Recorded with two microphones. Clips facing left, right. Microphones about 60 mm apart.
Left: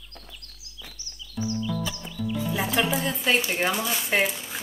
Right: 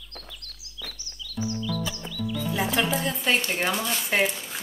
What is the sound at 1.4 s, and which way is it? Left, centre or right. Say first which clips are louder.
Music: even; centre.